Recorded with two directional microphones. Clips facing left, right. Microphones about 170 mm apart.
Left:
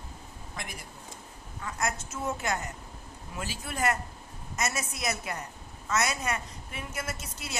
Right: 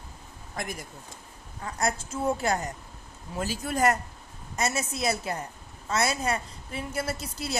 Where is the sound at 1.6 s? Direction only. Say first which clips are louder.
Right 4 dB; 35° right (ahead or behind).